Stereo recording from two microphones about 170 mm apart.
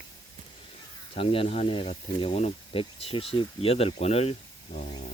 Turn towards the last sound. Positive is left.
turn(degrees=35)  # may be behind; listen again after turning